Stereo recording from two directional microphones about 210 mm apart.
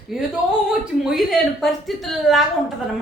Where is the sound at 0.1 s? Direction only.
Centre (ahead or behind).